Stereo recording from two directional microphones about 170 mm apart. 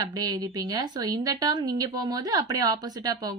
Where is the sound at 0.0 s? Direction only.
25° right (ahead or behind).